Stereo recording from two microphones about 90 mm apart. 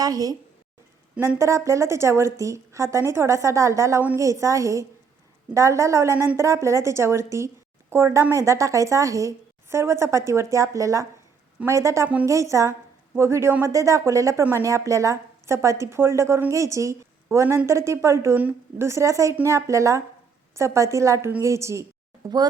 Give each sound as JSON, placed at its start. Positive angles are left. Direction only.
{"t": 0.0, "sound": "a woman's voice", "side_deg": -45}
{"t": 1.4, "sound": "a woman's voice", "side_deg": -35}